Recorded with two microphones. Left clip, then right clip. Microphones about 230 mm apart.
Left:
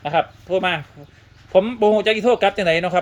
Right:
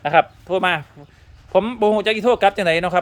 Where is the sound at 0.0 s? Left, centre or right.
Centre.